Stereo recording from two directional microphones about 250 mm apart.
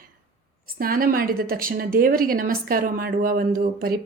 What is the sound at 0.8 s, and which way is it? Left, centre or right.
A woman's voice, right.